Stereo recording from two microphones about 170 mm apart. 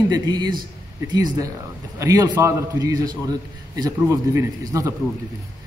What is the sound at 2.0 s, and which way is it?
A man's voice, 20° right (ahead or behind).